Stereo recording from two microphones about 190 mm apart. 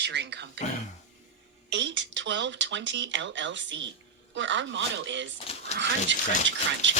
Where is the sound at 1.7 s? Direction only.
70° right (ahead or behind).